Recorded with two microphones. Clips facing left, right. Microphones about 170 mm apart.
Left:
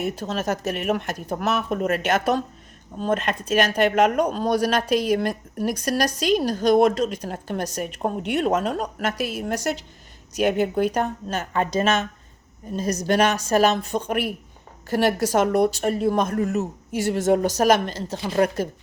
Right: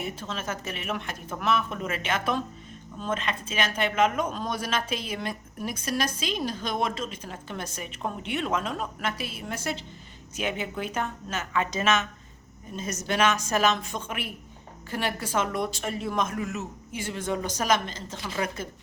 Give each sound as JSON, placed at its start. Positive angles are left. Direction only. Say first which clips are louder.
{"t": 0.0, "sound": "a woman's voice", "louder": "left 8 dB", "side_deg": 40}
{"t": 3.9, "sound": "a man's voice", "louder": "left 2 dB", "side_deg": 60}
{"t": 4.2, "sound": "a woman's voice", "louder": "left 9 dB", "side_deg": 35}